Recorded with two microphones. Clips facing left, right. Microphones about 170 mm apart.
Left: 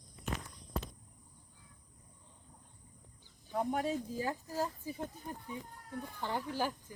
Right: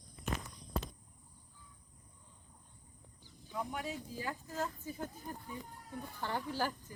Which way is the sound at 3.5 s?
45° left (ahead or behind).